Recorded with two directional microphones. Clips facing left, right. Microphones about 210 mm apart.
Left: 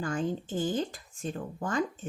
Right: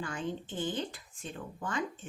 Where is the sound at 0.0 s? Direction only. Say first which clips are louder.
Left 6 dB; 45° left (ahead or behind).